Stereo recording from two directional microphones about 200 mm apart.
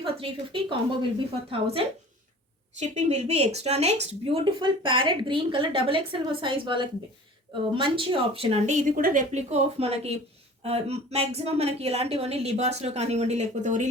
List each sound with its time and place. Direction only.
0.0 s a woman's voice: 25° right (ahead or behind)